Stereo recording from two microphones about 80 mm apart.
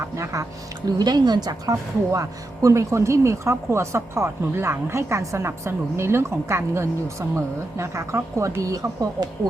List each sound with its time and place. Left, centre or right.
0.9 s speech: right